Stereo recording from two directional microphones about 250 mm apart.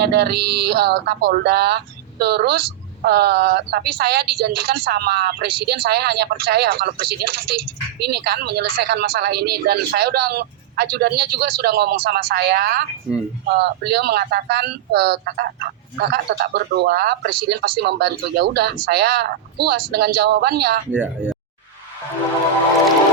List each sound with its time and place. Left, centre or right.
0.0 s speech: right
20.9 s speech: centre